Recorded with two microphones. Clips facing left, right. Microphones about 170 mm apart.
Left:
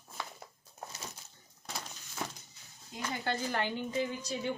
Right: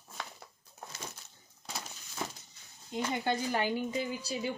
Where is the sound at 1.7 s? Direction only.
5° right (ahead or behind).